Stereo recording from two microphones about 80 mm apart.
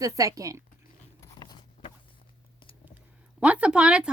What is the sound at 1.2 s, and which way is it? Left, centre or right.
Biting, left.